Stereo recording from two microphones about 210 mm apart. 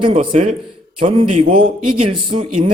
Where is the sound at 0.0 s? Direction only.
25° right (ahead or behind).